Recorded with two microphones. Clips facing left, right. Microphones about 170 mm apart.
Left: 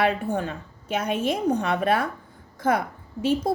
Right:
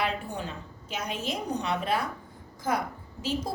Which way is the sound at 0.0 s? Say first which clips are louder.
Left 8 dB; 55° left (ahead or behind).